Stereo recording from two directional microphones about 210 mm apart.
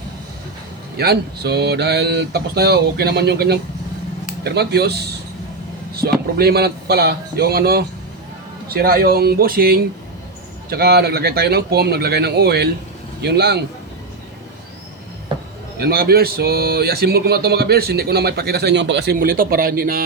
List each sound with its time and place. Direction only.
0.9 s speech: 50° right (ahead or behind)
15.8 s speech: 50° right (ahead or behind)